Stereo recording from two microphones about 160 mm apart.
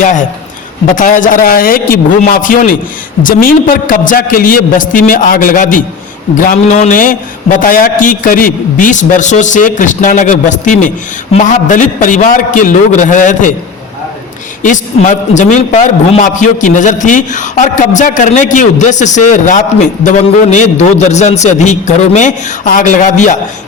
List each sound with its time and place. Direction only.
0.0 s a man's voice: 50° left (ahead or behind)
14.6 s a man's voice: 50° left (ahead or behind)